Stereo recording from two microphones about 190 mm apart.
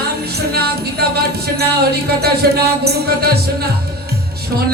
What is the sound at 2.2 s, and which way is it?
Speech, 55° right (ahead or behind).